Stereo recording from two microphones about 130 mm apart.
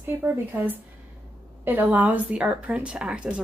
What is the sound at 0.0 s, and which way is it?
A woman's voice, 15° right (ahead or behind).